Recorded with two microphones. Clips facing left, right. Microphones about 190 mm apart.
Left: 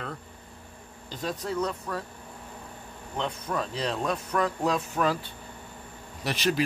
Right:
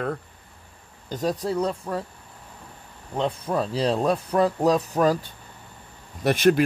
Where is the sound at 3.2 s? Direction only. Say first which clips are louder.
Right 6 dB; 30° right (ahead or behind).